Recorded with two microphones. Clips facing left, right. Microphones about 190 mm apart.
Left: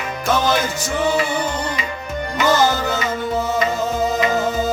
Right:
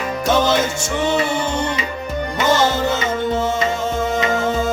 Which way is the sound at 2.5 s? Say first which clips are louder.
Right 1 dB; 25° right (ahead or behind).